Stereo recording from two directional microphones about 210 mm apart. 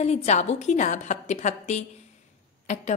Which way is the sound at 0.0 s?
30° left (ahead or behind).